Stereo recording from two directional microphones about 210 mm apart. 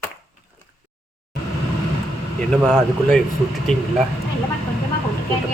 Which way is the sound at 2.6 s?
Centre (ahead or behind).